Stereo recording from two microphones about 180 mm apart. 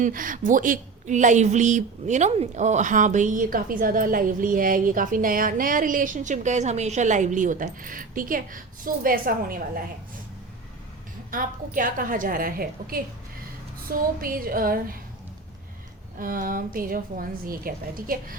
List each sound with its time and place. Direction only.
0.0 s speech: 50° right (ahead or behind)
11.3 s speech: 50° right (ahead or behind)
14.2 s speech: 55° right (ahead or behind)
16.1 s speech: 50° right (ahead or behind)